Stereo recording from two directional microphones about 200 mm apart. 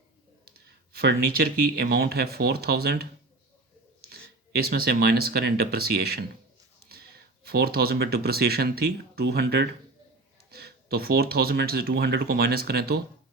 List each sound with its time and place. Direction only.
0.9 s speech: 50° right (ahead or behind)
7.4 s speech: 50° right (ahead or behind)